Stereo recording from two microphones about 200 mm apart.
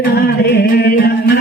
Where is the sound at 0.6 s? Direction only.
50° left (ahead or behind).